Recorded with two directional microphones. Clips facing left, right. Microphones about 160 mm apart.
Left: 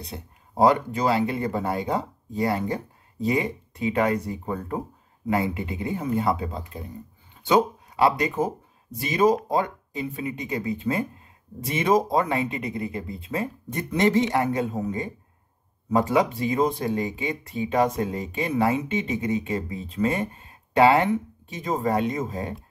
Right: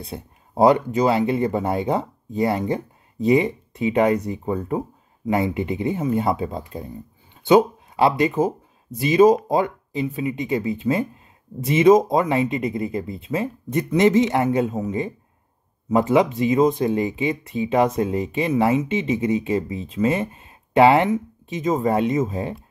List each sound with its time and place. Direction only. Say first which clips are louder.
0.0 s speech: right 4 dB; 25° right (ahead or behind)